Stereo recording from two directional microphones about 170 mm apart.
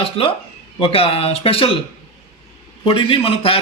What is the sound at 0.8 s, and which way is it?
Speech, 35° left (ahead or behind).